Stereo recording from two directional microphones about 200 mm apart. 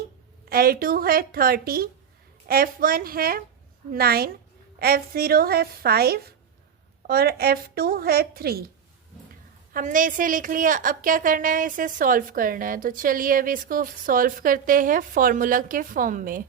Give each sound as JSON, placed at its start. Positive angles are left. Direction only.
{"t": 0.5, "sound": "a woman's voice", "side_deg": -50}
{"t": 9.7, "sound": "a woman's voice", "side_deg": -40}